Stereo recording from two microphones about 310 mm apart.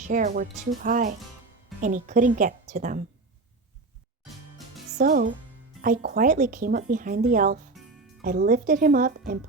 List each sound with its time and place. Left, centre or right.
0.0 s speech: right
4.9 s speech: right